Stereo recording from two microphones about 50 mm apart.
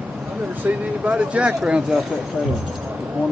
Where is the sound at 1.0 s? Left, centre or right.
Right.